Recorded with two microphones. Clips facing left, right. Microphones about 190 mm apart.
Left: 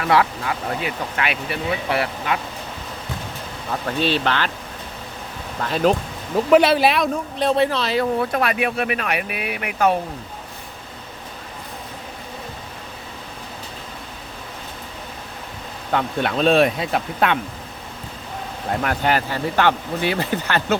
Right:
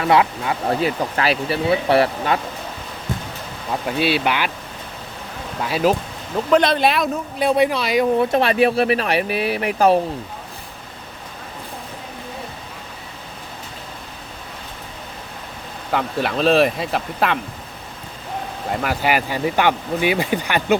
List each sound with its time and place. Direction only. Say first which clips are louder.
0.0 s speech: right 2 dB; 25° right (ahead or behind)
0.8 s speech: right 5 dB; 35° right (ahead or behind)
3.8 s speech: right 1 dB; 10° right (ahead or behind)
5.6 s speech: even; 5° right (ahead or behind)
6.5 s speech: left 1 dB; 5° left (ahead or behind); by 10.0 s 35° right (ahead or behind)
15.9 s speech: even; 5° right (ahead or behind)
18.7 s speech: even; 5° right (ahead or behind)